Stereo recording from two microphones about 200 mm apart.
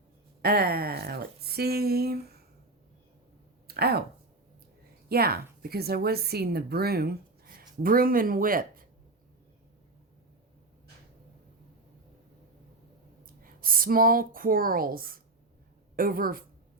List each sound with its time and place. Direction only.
0.4 s speech: 50° right (ahead or behind)
3.7 s speech: 50° right (ahead or behind)
5.0 s a woman's voice: 50° right (ahead or behind)
13.2 s a woman's voice: 45° right (ahead or behind)